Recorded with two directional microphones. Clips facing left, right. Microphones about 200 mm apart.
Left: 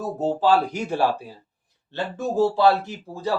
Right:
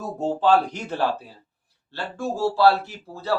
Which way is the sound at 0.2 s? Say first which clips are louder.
Even; 5° left (ahead or behind).